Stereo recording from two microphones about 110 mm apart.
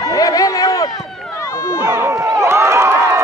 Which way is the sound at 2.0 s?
25° right (ahead or behind).